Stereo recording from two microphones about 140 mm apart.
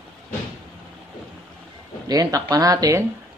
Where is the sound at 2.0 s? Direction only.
25° right (ahead or behind).